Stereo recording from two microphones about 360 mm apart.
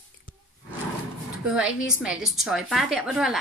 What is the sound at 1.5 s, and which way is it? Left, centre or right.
Speech, centre.